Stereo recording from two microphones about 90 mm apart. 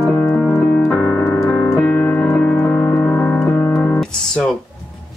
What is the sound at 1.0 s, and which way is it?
Keyboard, 30° left (ahead or behind).